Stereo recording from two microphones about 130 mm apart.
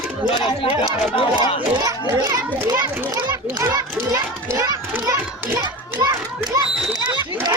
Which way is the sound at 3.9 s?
20° right (ahead or behind).